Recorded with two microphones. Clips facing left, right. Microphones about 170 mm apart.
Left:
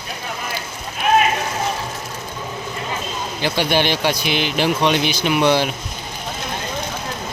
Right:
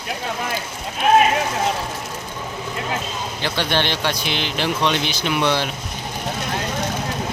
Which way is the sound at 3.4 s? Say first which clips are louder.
Left 4 dB; 10° left (ahead or behind).